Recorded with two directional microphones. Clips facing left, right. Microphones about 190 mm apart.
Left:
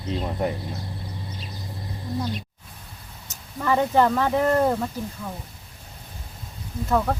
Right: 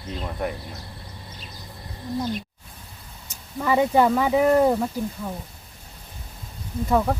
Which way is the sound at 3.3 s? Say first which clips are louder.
Right 1 dB; 10° right (ahead or behind).